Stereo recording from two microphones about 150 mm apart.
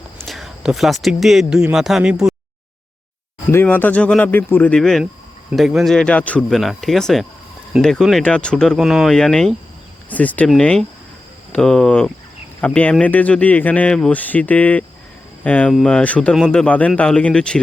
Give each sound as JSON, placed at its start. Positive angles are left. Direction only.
{"t": 0.3, "sound": "speech", "side_deg": 0}
{"t": 3.5, "sound": "speech", "side_deg": 15}